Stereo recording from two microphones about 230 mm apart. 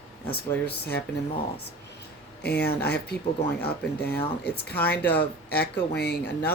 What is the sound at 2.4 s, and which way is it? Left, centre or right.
Speech, left.